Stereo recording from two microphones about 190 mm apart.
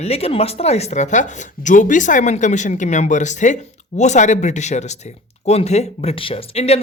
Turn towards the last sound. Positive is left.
turn(degrees=30)  # may be behind; listen again after turning